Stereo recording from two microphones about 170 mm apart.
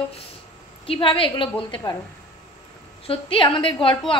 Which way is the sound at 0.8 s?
30° left (ahead or behind).